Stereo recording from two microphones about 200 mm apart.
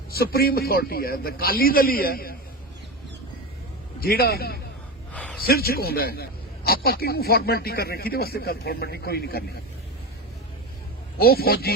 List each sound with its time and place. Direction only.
0.1 s speech: 50° left (ahead or behind)
4.0 s speech: 50° left (ahead or behind)
5.1 s a sound: 5° left (ahead or behind)
5.4 s speech: 50° left (ahead or behind)
11.2 s speech: 50° left (ahead or behind)